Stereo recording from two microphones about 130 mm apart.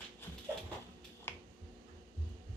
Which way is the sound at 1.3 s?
20° left (ahead or behind).